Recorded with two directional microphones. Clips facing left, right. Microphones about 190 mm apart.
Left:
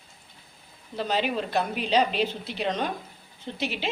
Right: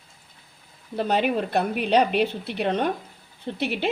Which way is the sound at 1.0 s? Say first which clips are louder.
Right 4 dB; 55° right (ahead or behind).